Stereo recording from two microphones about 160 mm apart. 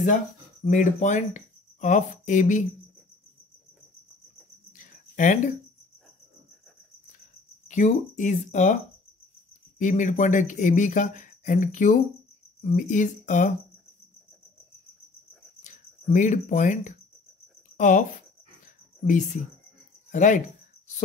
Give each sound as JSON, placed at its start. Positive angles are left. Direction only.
{"t": 0.7, "sound": "speech", "side_deg": 50}
{"t": 4.7, "sound": "a sound", "side_deg": 50}
{"t": 7.6, "sound": "speech", "side_deg": 50}
{"t": 9.8, "sound": "speech", "side_deg": 50}
{"t": 15.6, "sound": "speech", "side_deg": 50}
{"t": 20.1, "sound": "a sound", "side_deg": 50}